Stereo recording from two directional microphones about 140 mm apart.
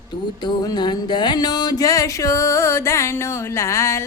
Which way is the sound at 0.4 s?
30° left (ahead or behind).